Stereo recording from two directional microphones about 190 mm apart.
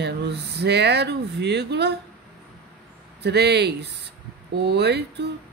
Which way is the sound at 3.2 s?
60° right (ahead or behind).